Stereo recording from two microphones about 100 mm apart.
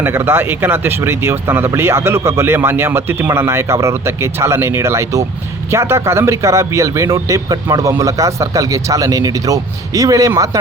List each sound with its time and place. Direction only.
0.0 s speech: 25° right (ahead or behind)